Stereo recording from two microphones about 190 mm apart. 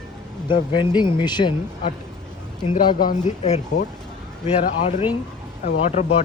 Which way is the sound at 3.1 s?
40° left (ahead or behind).